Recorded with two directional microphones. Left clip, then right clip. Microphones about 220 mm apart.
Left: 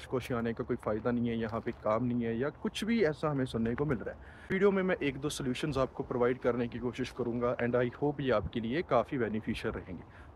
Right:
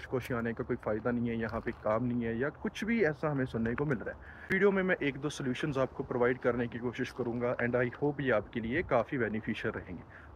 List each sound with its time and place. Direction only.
0.1 s speech: 15° left (ahead or behind)